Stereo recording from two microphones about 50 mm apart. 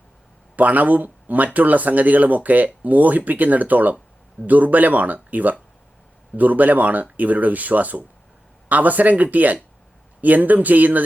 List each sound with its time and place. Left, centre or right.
0.5 s speech: right